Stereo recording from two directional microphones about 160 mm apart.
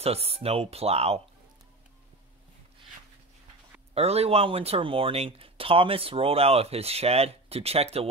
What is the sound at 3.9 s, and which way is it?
Speech, 40° right (ahead or behind).